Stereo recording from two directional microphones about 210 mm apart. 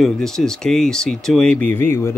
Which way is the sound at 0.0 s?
Centre (ahead or behind).